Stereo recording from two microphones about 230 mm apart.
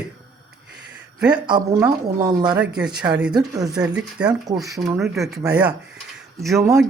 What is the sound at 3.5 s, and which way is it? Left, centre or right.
Speech, centre.